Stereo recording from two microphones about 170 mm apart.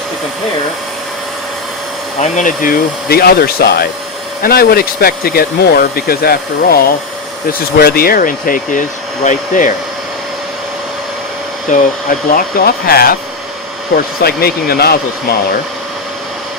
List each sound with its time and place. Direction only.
2.1 s speech: 45° left (ahead or behind)
11.7 s speech: 45° left (ahead or behind)
12.3 s speech: 60° left (ahead or behind)